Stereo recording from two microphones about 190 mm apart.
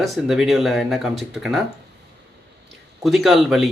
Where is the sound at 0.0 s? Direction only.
Centre (ahead or behind).